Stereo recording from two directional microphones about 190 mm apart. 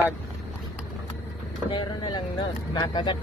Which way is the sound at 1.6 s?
25° left (ahead or behind).